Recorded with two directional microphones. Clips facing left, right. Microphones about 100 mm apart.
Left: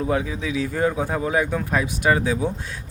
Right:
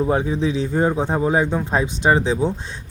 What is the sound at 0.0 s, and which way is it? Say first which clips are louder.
Speech: right 4 dB; 30° right (ahead or behind).